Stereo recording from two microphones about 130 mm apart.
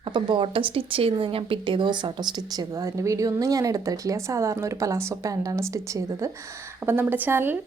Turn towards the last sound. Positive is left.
turn(degrees=-15)  # may be behind; listen again after turning